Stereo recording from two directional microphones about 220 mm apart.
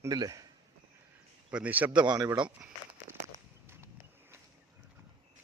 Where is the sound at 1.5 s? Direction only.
5° right (ahead or behind).